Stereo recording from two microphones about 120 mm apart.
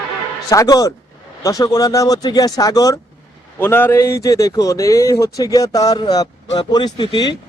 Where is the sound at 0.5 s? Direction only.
30° left (ahead or behind).